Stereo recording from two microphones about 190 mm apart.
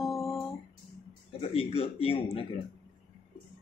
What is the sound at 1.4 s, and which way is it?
Speech, 30° left (ahead or behind).